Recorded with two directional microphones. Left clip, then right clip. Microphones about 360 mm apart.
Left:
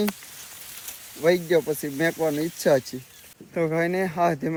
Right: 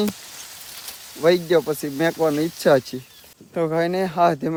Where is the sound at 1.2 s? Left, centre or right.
Centre.